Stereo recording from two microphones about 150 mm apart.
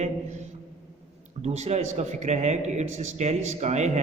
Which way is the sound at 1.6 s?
45° right (ahead or behind).